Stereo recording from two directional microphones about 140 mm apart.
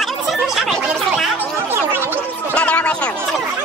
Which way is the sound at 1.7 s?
15° right (ahead or behind).